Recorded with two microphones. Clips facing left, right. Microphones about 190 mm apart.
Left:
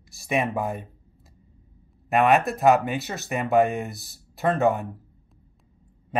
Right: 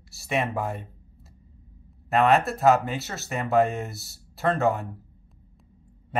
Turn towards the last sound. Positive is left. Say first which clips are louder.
# left 2 dB
turn(degrees=15)  # may be behind; listen again after turning